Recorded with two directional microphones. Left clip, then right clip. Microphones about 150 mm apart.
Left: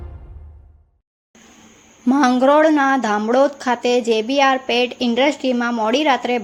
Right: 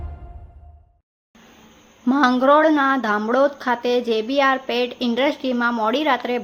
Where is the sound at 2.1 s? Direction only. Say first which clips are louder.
Left 2 dB; 20° left (ahead or behind).